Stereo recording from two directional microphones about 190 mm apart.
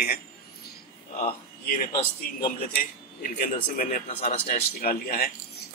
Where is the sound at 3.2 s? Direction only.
45° left (ahead or behind).